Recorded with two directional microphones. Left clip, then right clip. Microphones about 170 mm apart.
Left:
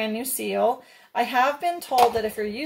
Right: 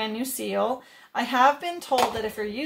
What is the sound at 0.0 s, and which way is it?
Speech, 20° right (ahead or behind).